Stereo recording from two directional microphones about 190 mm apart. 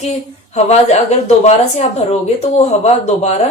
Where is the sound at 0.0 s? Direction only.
35° left (ahead or behind).